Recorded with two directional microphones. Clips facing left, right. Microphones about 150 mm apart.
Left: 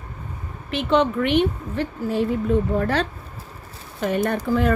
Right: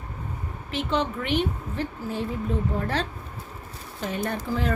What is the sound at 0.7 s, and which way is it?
A woman's voice, 65° left (ahead or behind).